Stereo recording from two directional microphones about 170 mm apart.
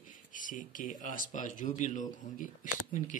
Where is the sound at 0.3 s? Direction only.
50° left (ahead or behind).